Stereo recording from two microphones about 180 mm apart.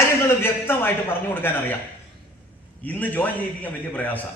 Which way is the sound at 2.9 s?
10° left (ahead or behind).